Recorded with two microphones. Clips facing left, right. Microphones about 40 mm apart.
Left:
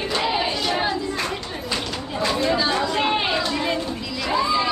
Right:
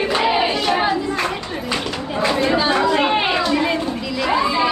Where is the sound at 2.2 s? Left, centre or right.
Right.